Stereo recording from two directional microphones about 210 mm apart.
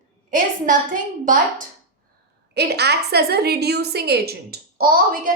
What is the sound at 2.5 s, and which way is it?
A woman's voice, 50° right (ahead or behind).